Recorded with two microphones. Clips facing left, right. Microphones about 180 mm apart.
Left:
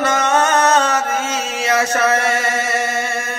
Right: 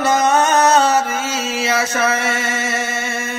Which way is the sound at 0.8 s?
35° right (ahead or behind).